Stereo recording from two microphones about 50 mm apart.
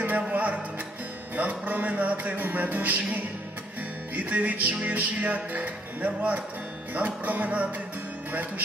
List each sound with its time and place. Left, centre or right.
0.2 s music: right